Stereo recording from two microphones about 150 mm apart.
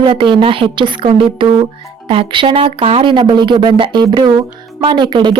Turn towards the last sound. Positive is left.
turn(degrees=-35)  # may be behind; listen again after turning